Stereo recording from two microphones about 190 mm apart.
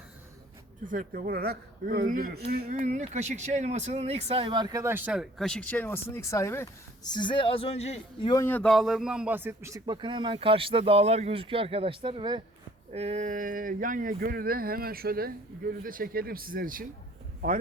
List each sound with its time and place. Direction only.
0.9 s speech: 45° right (ahead or behind); by 6.7 s 15° left (ahead or behind)
7.1 s speech: 25° left (ahead or behind)
8.3 s speech: 15° left (ahead or behind); by 12.4 s 25° right (ahead or behind)
12.9 s speech: 35° right (ahead or behind)